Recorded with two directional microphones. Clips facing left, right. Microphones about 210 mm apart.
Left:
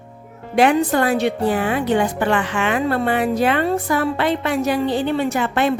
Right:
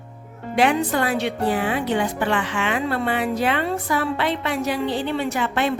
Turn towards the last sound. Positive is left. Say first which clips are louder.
# left 4 dB
turn(degrees=50)  # may be behind; listen again after turning